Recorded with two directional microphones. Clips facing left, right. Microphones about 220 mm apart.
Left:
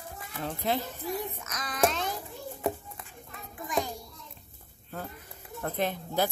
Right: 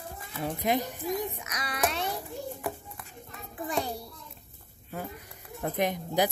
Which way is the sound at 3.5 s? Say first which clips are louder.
Even; 35° right (ahead or behind).